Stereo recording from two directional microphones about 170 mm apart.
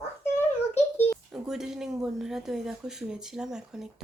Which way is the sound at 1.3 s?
5° right (ahead or behind).